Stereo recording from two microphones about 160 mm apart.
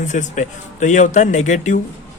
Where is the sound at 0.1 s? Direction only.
50° left (ahead or behind).